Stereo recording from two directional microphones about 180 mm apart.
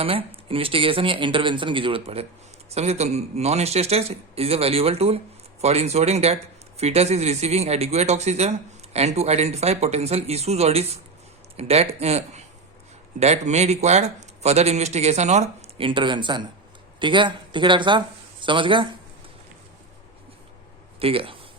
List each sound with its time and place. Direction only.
0.0 s speech: 30° right (ahead or behind)
21.0 s speech: 30° right (ahead or behind)